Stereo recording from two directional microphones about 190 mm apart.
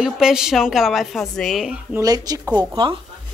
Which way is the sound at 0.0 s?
5° right (ahead or behind).